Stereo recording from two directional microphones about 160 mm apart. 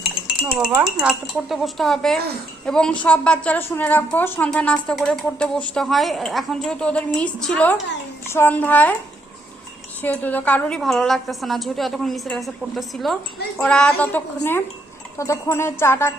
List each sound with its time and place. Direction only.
0.3 s a sound: 5° right (ahead or behind)
1.0 s a woman's voice: centre (ahead or behind)
8.3 s wind chime: 15° left (ahead or behind)
10.0 s a woman's voice: 10° left (ahead or behind)
15.2 s wind chime: 20° left (ahead or behind)